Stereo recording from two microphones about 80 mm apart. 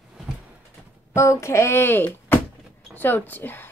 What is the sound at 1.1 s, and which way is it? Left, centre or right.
Speech, left.